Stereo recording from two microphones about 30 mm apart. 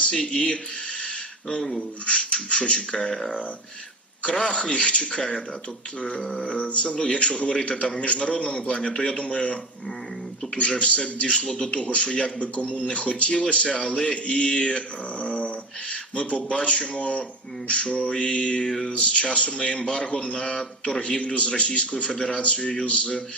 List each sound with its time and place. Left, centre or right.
0.0 s speech: left
2.0 s speech: left
4.2 s speech: left
6.4 s speech: left
6.9 s a man's voice: left
7.2 s speech: left
7.7 s speech: left
10.8 s a sound: left
11.0 s speech: left
13.9 s speech: left
15.2 s a sound: left
17.7 s a man's voice: left
21.2 s speech: left
22.4 s a sound: left